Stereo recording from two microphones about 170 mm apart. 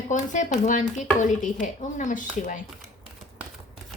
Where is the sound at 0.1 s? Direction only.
50° left (ahead or behind).